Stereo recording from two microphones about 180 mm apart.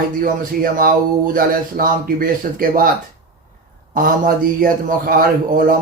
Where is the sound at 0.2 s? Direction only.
50° right (ahead or behind).